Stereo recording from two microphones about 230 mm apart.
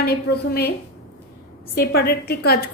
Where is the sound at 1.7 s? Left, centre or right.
Left.